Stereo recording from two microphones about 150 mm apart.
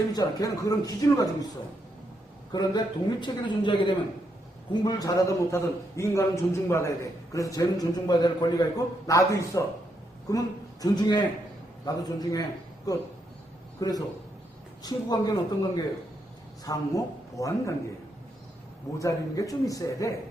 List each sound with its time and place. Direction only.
0.1 s a man's voice: 25° left (ahead or behind)
2.5 s a man's voice: 30° left (ahead or behind)
18.9 s a man's voice: 20° left (ahead or behind)